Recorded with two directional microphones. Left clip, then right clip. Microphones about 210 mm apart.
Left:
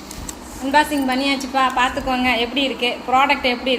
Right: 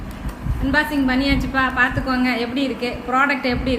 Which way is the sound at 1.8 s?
35° right (ahead or behind).